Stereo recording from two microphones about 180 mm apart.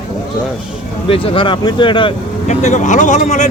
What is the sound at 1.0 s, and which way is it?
Speech, 30° left (ahead or behind).